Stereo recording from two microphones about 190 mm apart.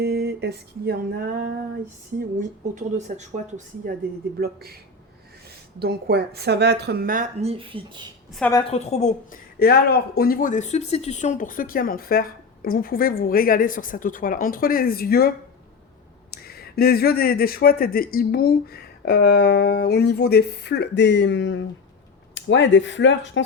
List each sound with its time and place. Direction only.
0.0 s a woman's voice: 60° right (ahead or behind)
2.7 s speech: 40° right (ahead or behind)
4.4 s a woman's voice: 55° right (ahead or behind)
7.4 s speech: 30° right (ahead or behind)
8.4 s a woman's voice: 10° left (ahead or behind)
8.7 s a woman's voice: 35° left (ahead or behind)
9.6 s speech: 55° left (ahead or behind)
16.3 s speech: 55° left (ahead or behind); by 23.4 s 75° left (ahead or behind)